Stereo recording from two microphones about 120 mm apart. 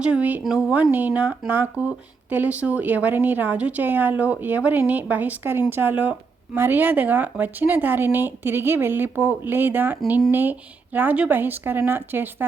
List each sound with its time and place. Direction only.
0.0 s a woman's voice: 10° right (ahead or behind)
10.1 s a woman's voice: 5° right (ahead or behind)